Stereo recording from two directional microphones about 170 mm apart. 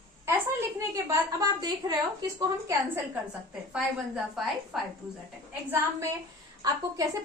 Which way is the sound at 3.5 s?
5° right (ahead or behind).